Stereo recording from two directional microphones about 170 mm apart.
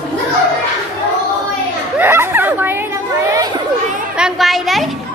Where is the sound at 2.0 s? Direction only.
15° right (ahead or behind).